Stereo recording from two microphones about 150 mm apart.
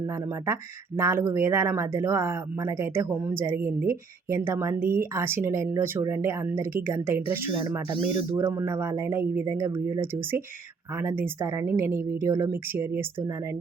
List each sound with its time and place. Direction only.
0.1 s speech: 20° right (ahead or behind)
7.9 s speech: 35° right (ahead or behind)
8.4 s speech: 20° right (ahead or behind)